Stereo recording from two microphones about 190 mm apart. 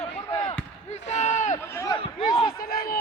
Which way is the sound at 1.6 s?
15° left (ahead or behind).